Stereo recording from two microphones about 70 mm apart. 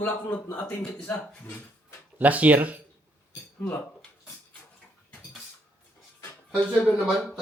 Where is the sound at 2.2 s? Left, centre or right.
Right.